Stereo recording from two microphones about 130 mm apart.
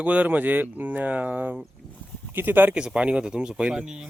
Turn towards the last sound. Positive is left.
turn(degrees=-5)  # may be behind; listen again after turning